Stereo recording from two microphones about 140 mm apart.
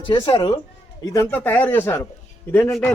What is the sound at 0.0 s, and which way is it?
Speech, 40° left (ahead or behind).